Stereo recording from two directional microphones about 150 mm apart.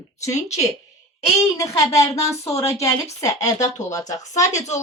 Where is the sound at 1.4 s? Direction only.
20° left (ahead or behind).